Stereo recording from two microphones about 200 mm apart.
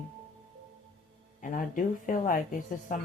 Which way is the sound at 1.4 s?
40° left (ahead or behind).